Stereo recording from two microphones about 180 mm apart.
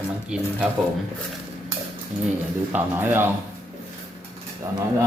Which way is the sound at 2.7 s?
10° right (ahead or behind).